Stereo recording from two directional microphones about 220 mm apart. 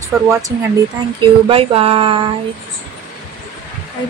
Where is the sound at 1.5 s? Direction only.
25° right (ahead or behind).